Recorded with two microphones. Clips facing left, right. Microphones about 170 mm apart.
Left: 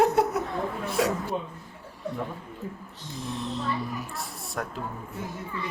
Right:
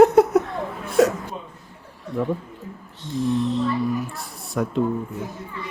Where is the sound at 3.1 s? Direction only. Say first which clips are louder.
Right 11 dB; centre (ahead or behind).